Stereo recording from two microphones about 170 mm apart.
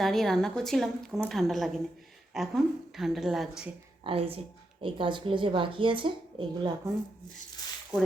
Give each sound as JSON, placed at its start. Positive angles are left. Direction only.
{"t": 0.0, "sound": "a woman's voice", "side_deg": 0}
{"t": 4.0, "sound": "speech", "side_deg": -35}